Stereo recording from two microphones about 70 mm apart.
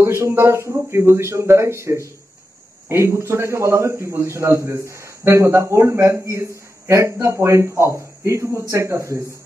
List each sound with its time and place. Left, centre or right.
0.0 s a man's voice: right